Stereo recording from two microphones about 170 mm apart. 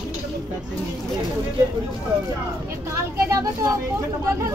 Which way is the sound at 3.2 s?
20° right (ahead or behind).